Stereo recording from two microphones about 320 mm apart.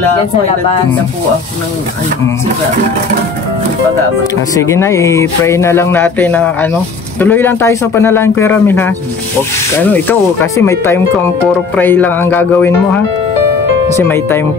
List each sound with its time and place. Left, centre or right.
4.2 s speech: centre